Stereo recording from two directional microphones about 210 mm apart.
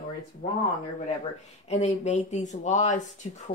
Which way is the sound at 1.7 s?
35° left (ahead or behind).